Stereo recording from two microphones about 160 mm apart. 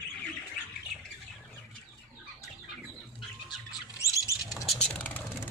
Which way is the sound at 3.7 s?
20° left (ahead or behind).